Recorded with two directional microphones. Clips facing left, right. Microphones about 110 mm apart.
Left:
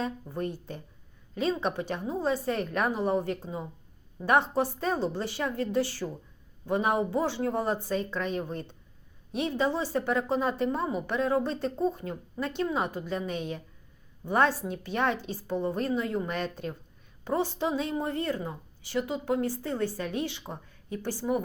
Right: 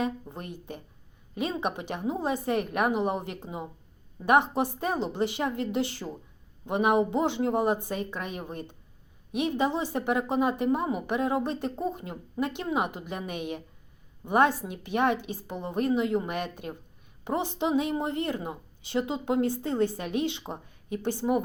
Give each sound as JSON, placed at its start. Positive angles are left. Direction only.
{"t": 0.0, "sound": "a woman's voice", "side_deg": -20}